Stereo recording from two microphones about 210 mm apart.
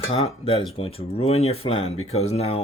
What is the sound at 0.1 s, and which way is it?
Speech, 25° left (ahead or behind).